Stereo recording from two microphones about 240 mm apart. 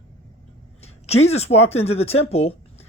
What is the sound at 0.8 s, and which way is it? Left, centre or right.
Speech, left.